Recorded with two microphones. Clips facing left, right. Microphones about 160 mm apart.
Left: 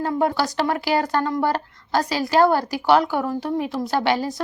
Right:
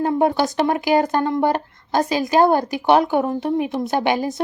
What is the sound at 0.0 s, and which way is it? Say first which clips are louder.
A woman's voice: right 3 dB; 20° right (ahead or behind).